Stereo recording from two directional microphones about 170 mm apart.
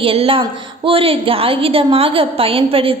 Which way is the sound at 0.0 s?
30° right (ahead or behind).